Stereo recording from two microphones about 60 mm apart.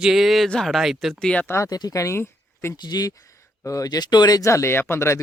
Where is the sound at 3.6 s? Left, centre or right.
Left.